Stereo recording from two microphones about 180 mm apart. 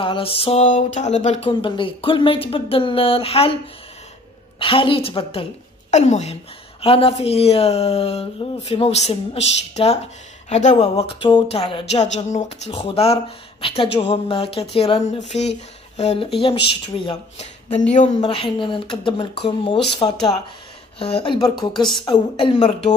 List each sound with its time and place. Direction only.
0.0 s speech: 30° left (ahead or behind)
1.5 s speech: 30° left (ahead or behind)
4.6 s speech: 30° left (ahead or behind)
18.2 s speech: 30° left (ahead or behind)